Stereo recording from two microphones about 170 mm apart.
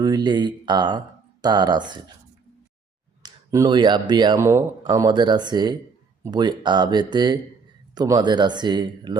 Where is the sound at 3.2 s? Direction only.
20° right (ahead or behind).